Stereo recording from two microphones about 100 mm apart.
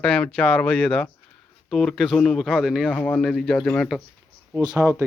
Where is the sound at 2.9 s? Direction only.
15° left (ahead or behind).